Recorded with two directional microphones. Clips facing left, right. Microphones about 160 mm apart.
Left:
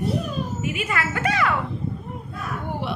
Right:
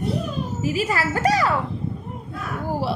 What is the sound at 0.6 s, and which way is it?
Speech, 35° right (ahead or behind).